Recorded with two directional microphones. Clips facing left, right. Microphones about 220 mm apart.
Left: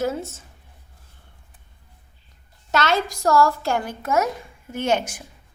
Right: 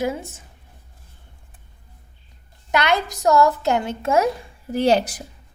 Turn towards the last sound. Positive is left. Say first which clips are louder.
# right 5 dB
turn(degrees=-35)  # may be behind; listen again after turning